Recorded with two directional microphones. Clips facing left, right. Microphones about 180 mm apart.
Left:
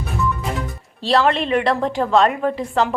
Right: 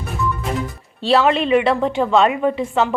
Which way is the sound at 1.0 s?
5° right (ahead or behind).